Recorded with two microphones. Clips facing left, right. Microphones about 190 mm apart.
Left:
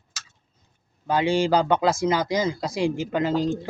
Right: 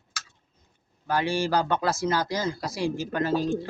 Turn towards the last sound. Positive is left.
turn(degrees=20)  # may be behind; listen again after turning